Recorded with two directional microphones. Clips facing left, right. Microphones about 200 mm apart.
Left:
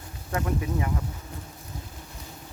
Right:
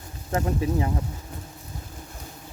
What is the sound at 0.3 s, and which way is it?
Speech, 30° right (ahead or behind).